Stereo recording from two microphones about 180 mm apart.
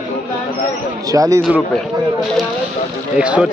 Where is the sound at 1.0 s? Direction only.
20° right (ahead or behind).